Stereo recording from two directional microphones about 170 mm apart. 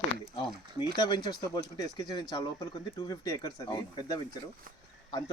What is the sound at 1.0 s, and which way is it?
Speech, 25° left (ahead or behind).